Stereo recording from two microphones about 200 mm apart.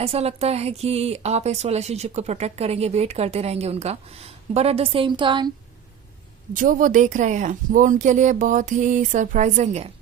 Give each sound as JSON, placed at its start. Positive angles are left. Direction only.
{"t": 0.0, "sound": "speech", "side_deg": -30}
{"t": 6.6, "sound": "speech", "side_deg": -40}